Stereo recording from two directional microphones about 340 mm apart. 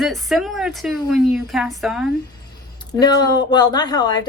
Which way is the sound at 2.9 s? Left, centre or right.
Centre.